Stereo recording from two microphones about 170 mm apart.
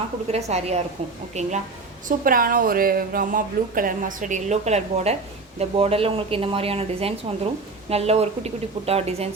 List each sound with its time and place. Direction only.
0.3 s speech: 40° right (ahead or behind)
2.0 s speech: 55° right (ahead or behind); by 9.3 s 35° right (ahead or behind)